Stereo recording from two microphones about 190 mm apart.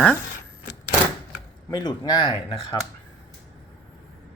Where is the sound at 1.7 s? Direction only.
20° left (ahead or behind).